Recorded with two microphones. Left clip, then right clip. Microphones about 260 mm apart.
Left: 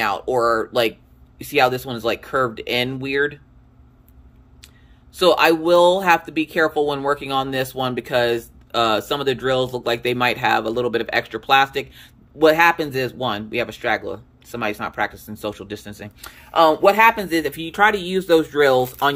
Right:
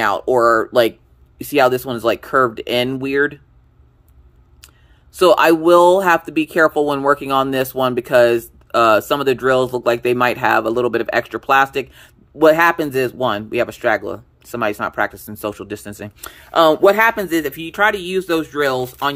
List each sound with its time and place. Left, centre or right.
0.0 s speech: right
5.1 s speech: right; by 19.1 s centre